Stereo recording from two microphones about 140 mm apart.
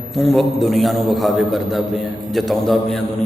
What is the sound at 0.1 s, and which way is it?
A man's voice, centre (ahead or behind).